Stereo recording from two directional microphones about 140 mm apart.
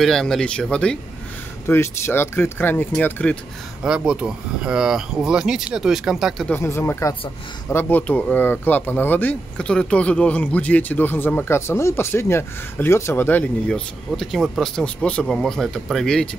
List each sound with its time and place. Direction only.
0.0 s speech: 5° left (ahead or behind)
1.7 s speech: 15° left (ahead or behind)
3.8 s speech: 5° right (ahead or behind)
6.5 s speech: 20° left (ahead or behind); by 16.3 s 5° left (ahead or behind)